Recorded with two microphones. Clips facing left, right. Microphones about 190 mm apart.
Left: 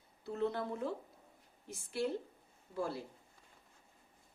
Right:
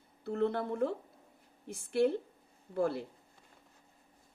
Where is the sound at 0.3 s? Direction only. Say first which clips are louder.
Right 4 dB; 55° right (ahead or behind).